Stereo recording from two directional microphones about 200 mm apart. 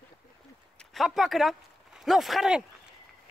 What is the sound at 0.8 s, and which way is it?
A man's voice, centre (ahead or behind).